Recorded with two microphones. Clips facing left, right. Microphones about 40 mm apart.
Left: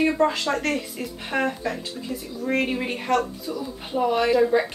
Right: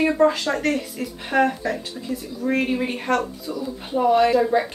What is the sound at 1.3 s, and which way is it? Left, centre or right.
Speech, centre.